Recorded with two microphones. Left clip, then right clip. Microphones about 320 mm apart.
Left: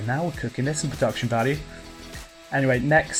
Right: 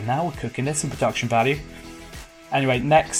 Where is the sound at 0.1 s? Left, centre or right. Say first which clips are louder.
Right 3 dB; right.